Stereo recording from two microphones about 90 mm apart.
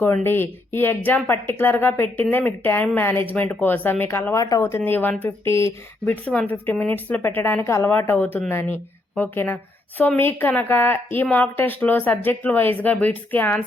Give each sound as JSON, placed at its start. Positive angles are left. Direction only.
{"t": 0.0, "sound": "a woman's voice", "side_deg": 25}
{"t": 4.4, "sound": "speech", "side_deg": 40}
{"t": 4.8, "sound": "a woman's voice", "side_deg": 20}
{"t": 6.5, "sound": "a woman's voice", "side_deg": 20}